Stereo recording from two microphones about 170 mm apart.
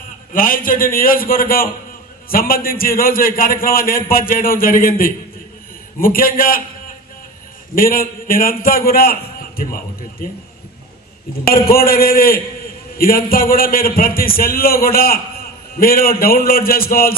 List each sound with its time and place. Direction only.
0.3 s a man's voice: 55° left (ahead or behind)
7.7 s a man's voice: 55° left (ahead or behind)
11.4 s a man's voice: 60° left (ahead or behind)